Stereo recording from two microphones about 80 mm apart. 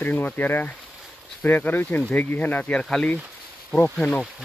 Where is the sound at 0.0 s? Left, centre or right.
Left.